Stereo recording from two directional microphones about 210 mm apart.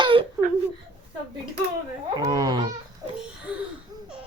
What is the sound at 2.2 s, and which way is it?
Babbling, 15° right (ahead or behind).